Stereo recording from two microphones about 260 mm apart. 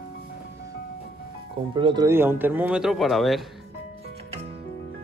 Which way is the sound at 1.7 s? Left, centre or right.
Centre.